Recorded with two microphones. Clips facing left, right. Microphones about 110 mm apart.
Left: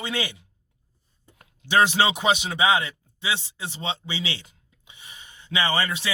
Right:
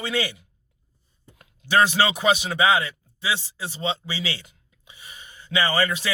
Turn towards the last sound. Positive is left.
turn(degrees=20)  # may be behind; listen again after turning